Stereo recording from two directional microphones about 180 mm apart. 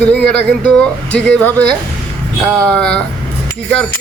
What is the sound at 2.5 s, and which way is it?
Speech, 5° left (ahead or behind).